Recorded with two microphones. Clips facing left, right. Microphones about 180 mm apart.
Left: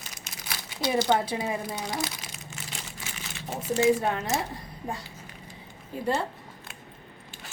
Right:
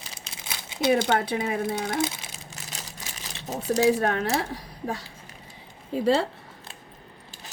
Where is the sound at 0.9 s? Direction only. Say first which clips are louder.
Right 1 dB; 60° right (ahead or behind).